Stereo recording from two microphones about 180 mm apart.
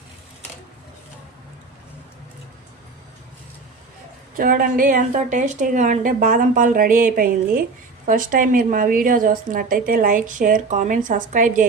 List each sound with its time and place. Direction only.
4.4 s a woman's voice: 50° right (ahead or behind)